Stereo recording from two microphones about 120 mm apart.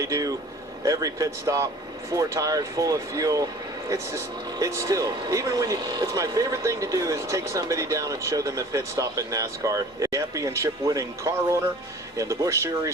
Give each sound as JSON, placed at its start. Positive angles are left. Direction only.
{"t": 0.0, "sound": "speech", "side_deg": -30}